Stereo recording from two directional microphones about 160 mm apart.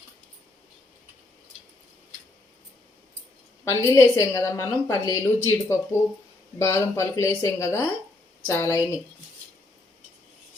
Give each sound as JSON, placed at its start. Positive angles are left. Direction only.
{"t": 3.6, "sound": "a woman's voice", "side_deg": 15}